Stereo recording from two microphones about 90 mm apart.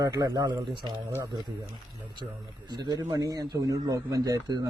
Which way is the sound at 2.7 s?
55° right (ahead or behind).